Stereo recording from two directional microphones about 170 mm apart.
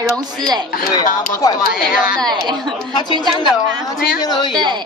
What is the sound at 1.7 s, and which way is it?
Speech, 55° left (ahead or behind).